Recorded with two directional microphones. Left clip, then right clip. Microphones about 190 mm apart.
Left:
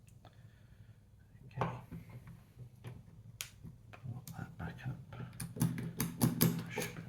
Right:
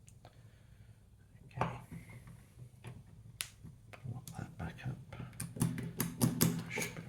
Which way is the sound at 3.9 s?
30° right (ahead or behind).